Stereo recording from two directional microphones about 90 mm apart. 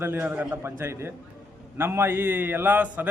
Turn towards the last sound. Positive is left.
turn(degrees=-20)  # may be behind; listen again after turning